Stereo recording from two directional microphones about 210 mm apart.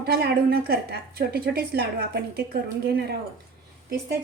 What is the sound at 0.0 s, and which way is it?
A woman's voice, 50° right (ahead or behind).